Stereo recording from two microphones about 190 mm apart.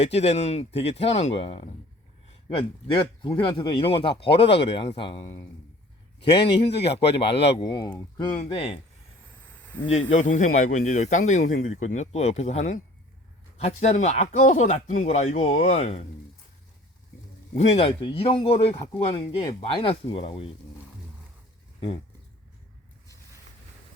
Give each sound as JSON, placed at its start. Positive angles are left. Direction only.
{"t": 0.0, "sound": "a man's voice", "side_deg": 35}
{"t": 6.1, "sound": "speech", "side_deg": 65}
{"t": 7.6, "sound": "speech", "side_deg": 20}
{"t": 9.4, "sound": "a sound", "side_deg": 10}
{"t": 9.8, "sound": "a man's voice", "side_deg": 35}
{"t": 17.5, "sound": "speech", "side_deg": 35}